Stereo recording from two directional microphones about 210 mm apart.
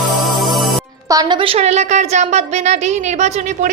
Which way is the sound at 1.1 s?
20° right (ahead or behind).